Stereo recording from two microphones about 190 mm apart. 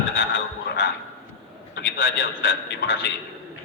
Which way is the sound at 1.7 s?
60° left (ahead or behind).